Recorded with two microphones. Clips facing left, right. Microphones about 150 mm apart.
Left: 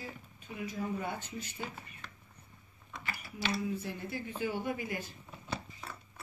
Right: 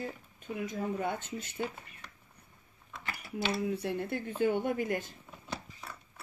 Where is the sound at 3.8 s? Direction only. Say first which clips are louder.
Right 5 dB; 60° right (ahead or behind).